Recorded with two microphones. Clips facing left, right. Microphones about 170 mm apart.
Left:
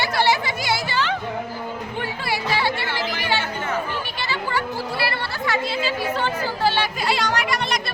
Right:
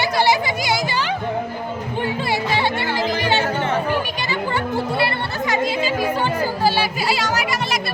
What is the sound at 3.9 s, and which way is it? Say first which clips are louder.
Chatter: right 5 dB; 15° right (ahead or behind).